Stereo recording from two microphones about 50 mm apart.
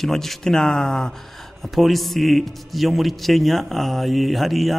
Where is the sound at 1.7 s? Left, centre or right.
Centre.